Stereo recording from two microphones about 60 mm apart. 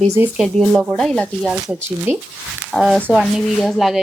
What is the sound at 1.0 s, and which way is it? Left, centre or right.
Speech, centre.